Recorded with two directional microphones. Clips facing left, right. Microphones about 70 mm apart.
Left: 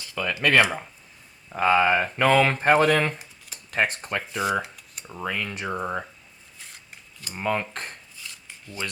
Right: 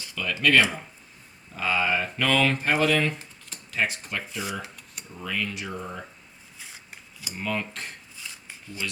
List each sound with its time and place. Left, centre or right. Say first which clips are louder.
0.1 s speech: left 1 dB; left
5.1 s speech: left 1 dB; left
6.6 s scissors: right 1 dB; centre
7.4 s speech: left 4 dB; left